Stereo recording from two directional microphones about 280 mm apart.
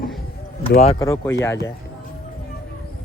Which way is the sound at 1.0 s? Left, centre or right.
Centre.